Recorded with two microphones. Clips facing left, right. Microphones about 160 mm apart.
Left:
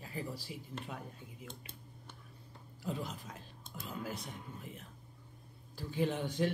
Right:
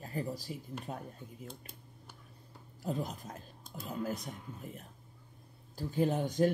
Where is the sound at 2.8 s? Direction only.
45° right (ahead or behind).